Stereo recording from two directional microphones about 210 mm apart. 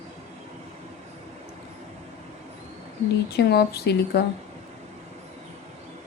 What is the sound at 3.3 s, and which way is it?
Speech, 50° left (ahead or behind).